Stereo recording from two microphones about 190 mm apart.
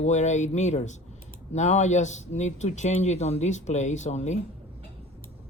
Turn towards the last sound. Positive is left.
turn(degrees=40)  # may be behind; listen again after turning